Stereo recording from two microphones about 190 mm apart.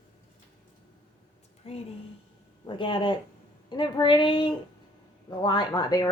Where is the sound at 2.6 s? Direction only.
25° left (ahead or behind).